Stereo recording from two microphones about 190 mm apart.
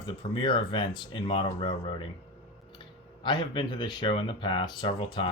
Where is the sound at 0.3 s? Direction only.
25° left (ahead or behind).